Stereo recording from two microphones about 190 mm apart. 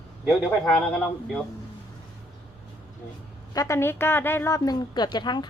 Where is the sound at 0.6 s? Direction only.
5° left (ahead or behind).